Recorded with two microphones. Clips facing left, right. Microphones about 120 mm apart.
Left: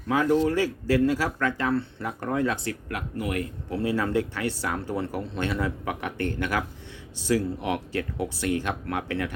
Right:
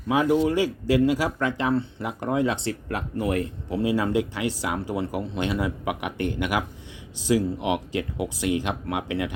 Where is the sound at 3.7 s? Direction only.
15° right (ahead or behind).